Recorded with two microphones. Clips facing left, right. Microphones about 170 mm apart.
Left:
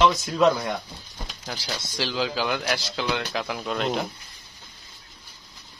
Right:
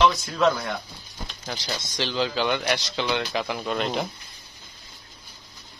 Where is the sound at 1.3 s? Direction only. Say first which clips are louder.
Right 1 dB; 5° left (ahead or behind).